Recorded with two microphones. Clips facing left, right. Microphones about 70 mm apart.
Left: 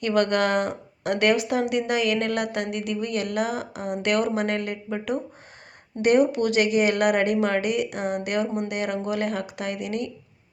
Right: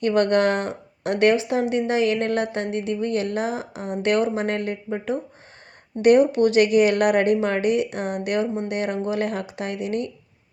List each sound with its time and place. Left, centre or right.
0.0 s speech: right
6.0 s speech: right